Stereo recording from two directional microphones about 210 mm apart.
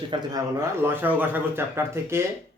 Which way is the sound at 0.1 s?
20° right (ahead or behind).